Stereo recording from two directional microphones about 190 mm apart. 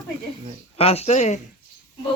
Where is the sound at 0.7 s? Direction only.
30° left (ahead or behind).